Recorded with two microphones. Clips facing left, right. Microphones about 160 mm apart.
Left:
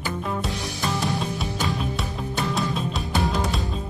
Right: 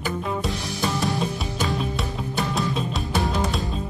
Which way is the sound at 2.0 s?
Centre (ahead or behind).